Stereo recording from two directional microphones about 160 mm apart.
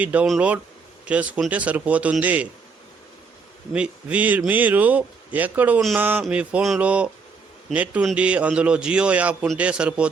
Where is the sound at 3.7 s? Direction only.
5° right (ahead or behind).